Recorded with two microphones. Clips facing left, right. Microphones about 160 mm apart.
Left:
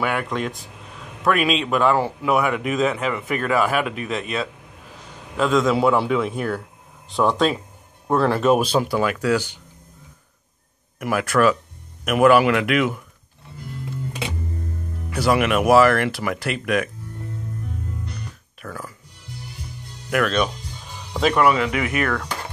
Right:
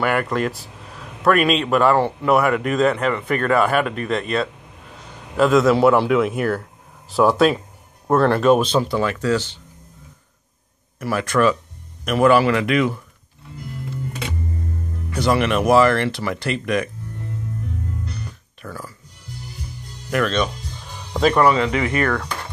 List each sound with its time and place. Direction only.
0.0 s speech: centre (ahead or behind)
11.0 s speech: 10° left (ahead or behind)
15.0 s speech: 5° left (ahead or behind)
18.6 s speech: 10° right (ahead or behind)
20.1 s speech: 5° left (ahead or behind)
21.4 s speech: 30° right (ahead or behind)
22.0 s speech: 5° right (ahead or behind)